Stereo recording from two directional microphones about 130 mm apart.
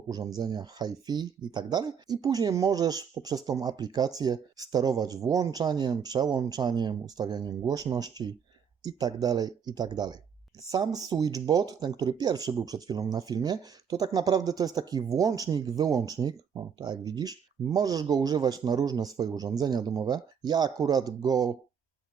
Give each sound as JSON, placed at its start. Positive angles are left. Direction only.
{"t": 0.1, "sound": "speech", "side_deg": -30}